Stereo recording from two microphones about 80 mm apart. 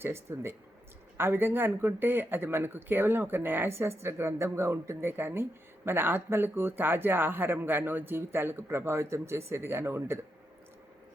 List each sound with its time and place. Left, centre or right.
0.0 s speech: right